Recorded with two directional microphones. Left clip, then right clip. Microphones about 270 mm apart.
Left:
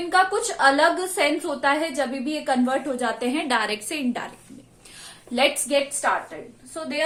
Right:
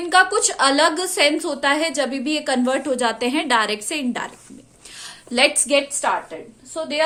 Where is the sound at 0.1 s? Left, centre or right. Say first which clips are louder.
Right 4 dB; right; by 4.3 s centre.